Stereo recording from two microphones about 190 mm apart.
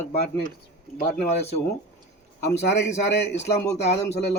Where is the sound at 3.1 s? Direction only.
65° left (ahead or behind).